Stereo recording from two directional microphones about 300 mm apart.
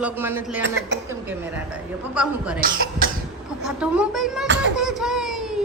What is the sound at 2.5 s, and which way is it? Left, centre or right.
Speech, right.